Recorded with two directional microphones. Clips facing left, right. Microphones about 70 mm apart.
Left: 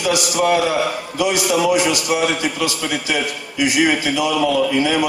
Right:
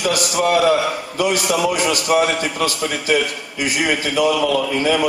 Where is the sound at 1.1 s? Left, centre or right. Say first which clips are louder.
Left 1 dB; right.